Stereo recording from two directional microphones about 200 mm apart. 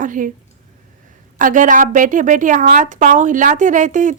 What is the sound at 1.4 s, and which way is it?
A woman's voice, 40° right (ahead or behind).